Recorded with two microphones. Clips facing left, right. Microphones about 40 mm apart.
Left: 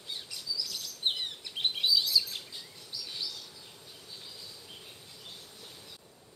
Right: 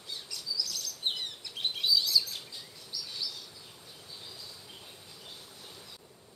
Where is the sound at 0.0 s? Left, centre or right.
Left.